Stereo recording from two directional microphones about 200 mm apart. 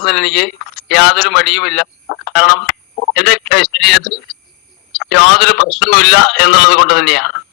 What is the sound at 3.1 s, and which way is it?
Speech, 55° left (ahead or behind).